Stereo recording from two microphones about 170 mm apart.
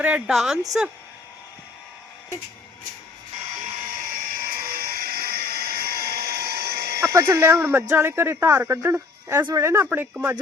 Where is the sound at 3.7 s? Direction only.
55° right (ahead or behind).